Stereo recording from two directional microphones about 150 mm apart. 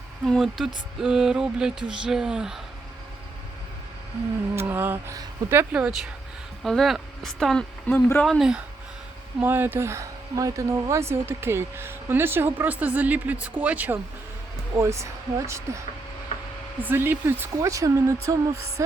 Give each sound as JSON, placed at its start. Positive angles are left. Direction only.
{"t": 0.3, "sound": "speech", "side_deg": 0}
{"t": 4.5, "sound": "speech", "side_deg": -15}
{"t": 16.8, "sound": "speech", "side_deg": -15}